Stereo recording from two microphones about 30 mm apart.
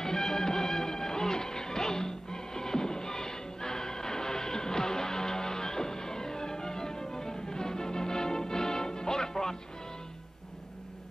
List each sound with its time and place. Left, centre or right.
0.0 s music: centre